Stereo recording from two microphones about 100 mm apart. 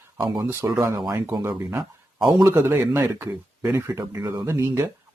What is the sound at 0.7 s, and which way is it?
Speech, 40° right (ahead or behind).